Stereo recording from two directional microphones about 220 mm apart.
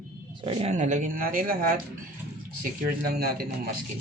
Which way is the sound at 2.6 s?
40° right (ahead or behind).